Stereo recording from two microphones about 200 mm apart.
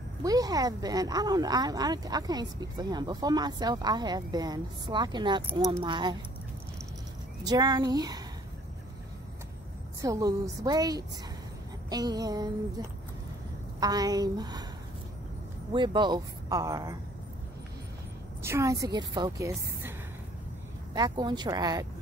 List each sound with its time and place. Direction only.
0.2 s speech: 20° right (ahead or behind)
7.4 s speech: 20° right (ahead or behind)
10.0 s a woman's voice: 15° right (ahead or behind)
15.7 s speech: 25° right (ahead or behind)
18.4 s a woman's voice: 15° right (ahead or behind)
20.9 s speech: 20° right (ahead or behind)